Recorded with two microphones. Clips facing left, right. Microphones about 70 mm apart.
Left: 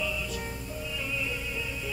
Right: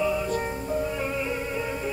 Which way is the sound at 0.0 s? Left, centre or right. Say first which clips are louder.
Right 9 dB; right.